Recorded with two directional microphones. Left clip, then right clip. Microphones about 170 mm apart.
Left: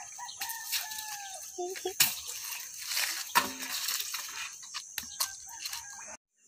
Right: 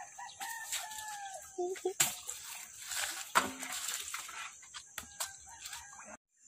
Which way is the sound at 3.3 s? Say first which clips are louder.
Left 2 dB; 15° left (ahead or behind).